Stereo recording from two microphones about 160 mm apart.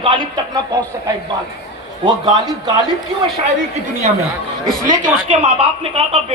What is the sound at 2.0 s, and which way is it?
Speech, 30° right (ahead or behind).